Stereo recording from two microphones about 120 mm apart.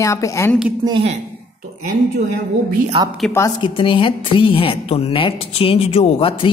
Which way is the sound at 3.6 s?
45° left (ahead or behind).